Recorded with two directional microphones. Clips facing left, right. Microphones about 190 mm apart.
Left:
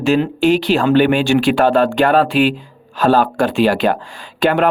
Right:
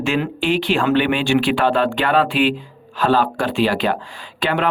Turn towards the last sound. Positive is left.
turn(degrees=45)  # may be behind; listen again after turning